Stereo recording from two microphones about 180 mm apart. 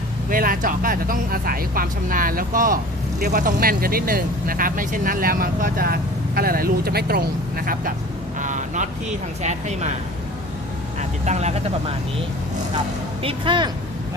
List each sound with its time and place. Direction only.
0.3 s speech: 50° right (ahead or behind)
8.4 s vehicle: 45° right (ahead or behind)
9.4 s speech: 40° right (ahead or behind)
11.3 s speech: 40° right (ahead or behind)
13.2 s speech: 30° right (ahead or behind)